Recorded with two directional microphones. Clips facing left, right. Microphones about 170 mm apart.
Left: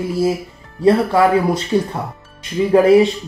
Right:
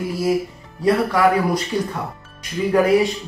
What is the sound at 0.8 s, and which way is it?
Speech, 25° left (ahead or behind).